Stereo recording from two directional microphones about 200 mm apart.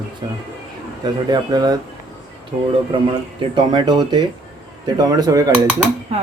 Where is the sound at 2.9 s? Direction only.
20° right (ahead or behind).